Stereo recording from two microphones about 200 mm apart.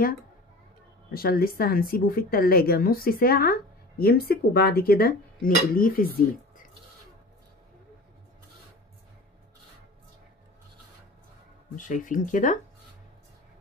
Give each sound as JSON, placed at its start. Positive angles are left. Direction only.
{"t": 1.1, "sound": "speech", "side_deg": 50}
{"t": 11.7, "sound": "speech", "side_deg": 40}